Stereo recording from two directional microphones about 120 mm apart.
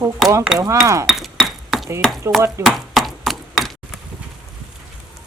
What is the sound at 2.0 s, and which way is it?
Chop, centre (ahead or behind).